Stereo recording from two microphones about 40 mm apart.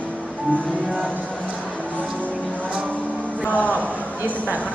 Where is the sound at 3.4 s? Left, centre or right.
Left.